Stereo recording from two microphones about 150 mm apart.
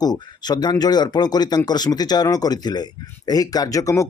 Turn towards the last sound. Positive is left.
turn(degrees=20)  # may be behind; listen again after turning